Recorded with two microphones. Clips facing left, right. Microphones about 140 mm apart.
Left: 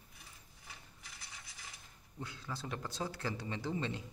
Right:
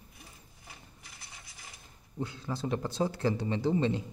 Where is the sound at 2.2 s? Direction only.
25° right (ahead or behind).